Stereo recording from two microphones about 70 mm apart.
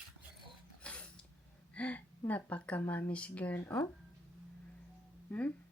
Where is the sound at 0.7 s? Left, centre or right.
Centre.